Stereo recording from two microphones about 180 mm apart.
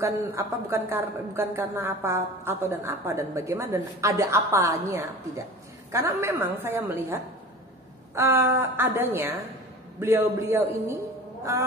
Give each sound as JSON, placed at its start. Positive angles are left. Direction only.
{"t": 0.0, "sound": "a woman's voice", "side_deg": -15}